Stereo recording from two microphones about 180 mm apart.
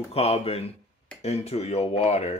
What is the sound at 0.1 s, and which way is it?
Speech, 35° left (ahead or behind).